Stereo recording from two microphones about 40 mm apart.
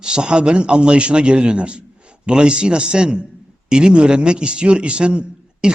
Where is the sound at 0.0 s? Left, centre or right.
Right.